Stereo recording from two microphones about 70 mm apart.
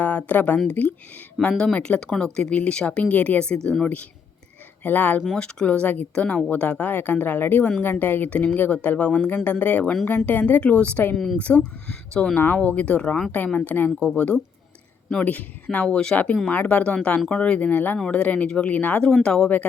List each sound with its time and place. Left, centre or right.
0.0 s speech: left
4.8 s speech: left
5.4 s speech: centre
19.1 s speech: centre